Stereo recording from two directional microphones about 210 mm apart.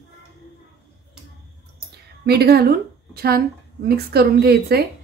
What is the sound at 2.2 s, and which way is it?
Speech, 50° right (ahead or behind).